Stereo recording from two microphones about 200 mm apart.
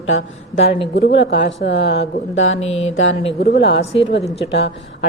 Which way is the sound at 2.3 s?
70° left (ahead or behind).